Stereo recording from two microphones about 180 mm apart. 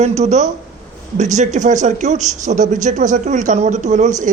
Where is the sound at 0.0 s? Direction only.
35° right (ahead or behind).